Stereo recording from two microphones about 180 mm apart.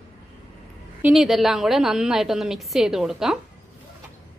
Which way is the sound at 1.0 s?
Centre (ahead or behind).